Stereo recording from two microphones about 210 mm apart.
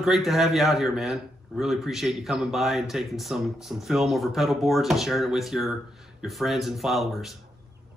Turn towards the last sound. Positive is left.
turn(degrees=0)  # may be behind; listen again after turning